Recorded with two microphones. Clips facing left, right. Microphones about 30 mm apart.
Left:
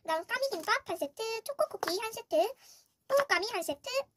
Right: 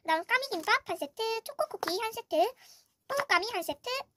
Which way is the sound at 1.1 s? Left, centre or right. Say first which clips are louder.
Right 1 dB; right.